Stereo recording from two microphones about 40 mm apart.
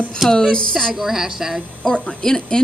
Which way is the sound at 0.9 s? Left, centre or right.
Centre.